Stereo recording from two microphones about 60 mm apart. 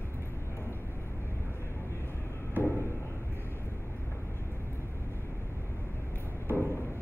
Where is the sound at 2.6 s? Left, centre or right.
Left.